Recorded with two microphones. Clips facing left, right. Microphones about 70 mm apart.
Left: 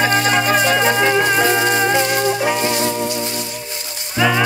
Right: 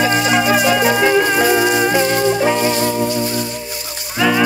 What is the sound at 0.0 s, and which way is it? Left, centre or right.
Music, left.